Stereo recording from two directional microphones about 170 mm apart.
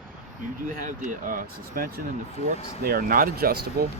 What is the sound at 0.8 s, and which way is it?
Speech, 50° right (ahead or behind).